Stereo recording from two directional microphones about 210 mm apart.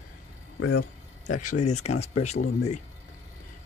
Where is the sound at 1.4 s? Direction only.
35° left (ahead or behind).